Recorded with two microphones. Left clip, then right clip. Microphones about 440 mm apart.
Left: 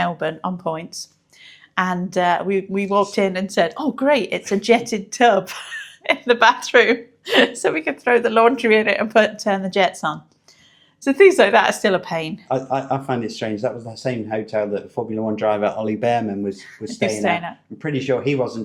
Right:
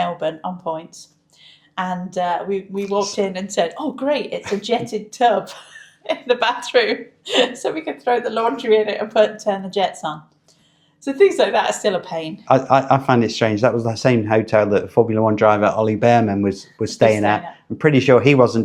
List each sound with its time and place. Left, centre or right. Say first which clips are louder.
0.0 s speech: even; left
12.5 s speech: right 9 dB; right